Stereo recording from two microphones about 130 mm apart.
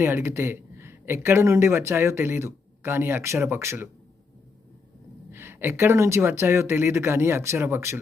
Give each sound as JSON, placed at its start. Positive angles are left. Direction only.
{"t": 0.0, "sound": "speech", "side_deg": -20}
{"t": 5.3, "sound": "speech", "side_deg": -20}